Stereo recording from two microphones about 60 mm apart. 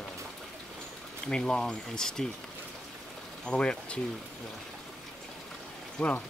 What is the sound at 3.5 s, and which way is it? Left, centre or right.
Speech, centre.